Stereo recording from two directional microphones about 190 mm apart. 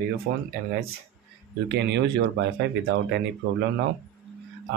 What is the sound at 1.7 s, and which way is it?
Speech, 65° right (ahead or behind).